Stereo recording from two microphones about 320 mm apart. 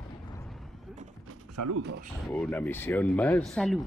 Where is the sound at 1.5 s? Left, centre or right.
Right.